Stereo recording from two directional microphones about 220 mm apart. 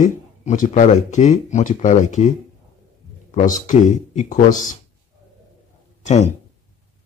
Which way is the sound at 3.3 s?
35° left (ahead or behind).